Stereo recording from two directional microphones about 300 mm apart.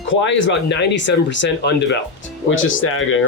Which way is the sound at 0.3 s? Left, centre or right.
Left.